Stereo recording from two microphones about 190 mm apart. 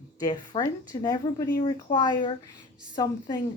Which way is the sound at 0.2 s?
20° left (ahead or behind).